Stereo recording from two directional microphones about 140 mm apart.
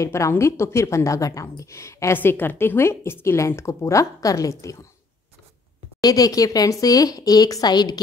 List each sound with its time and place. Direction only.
0.0 s a woman's voice: 20° left (ahead or behind)
5.9 s a woman's voice: 25° left (ahead or behind)